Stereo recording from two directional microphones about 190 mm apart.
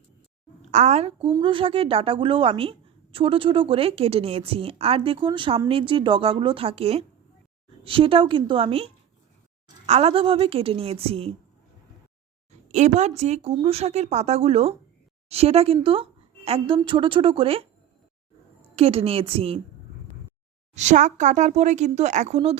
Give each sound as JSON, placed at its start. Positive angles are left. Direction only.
{"t": 0.7, "sound": "speech", "side_deg": -35}
{"t": 12.5, "sound": "a woman's voice", "side_deg": -40}
{"t": 18.8, "sound": "speech", "side_deg": -30}
{"t": 20.7, "sound": "speech", "side_deg": -40}